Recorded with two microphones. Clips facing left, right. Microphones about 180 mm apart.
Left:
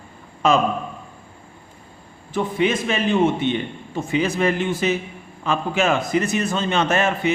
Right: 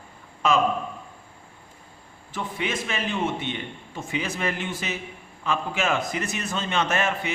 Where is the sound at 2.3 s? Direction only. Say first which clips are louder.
Left 9 dB; 25° left (ahead or behind).